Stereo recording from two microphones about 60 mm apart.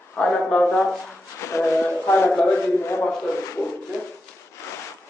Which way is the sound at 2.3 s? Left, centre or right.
Left.